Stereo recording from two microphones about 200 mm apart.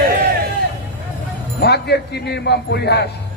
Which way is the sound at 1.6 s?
55° left (ahead or behind).